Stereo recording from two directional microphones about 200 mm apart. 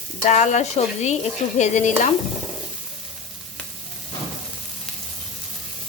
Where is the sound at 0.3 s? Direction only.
35° left (ahead or behind).